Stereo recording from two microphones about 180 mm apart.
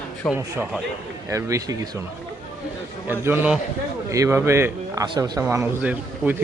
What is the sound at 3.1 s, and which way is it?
Speech, 10° right (ahead or behind).